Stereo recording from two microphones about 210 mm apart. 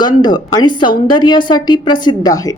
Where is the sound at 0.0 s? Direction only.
20° left (ahead or behind).